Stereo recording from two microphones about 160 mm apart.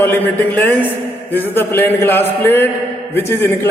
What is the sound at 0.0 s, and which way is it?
A man's voice, 10° left (ahead or behind).